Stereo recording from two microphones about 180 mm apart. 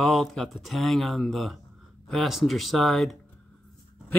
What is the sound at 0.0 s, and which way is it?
Speech, centre (ahead or behind).